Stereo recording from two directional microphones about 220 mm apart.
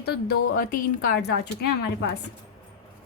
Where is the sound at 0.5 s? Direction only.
45° left (ahead or behind).